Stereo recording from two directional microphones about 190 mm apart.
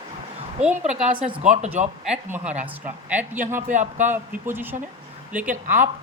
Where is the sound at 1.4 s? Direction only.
40° right (ahead or behind).